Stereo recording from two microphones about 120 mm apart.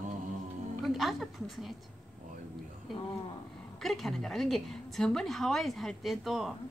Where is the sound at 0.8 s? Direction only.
Centre (ahead or behind).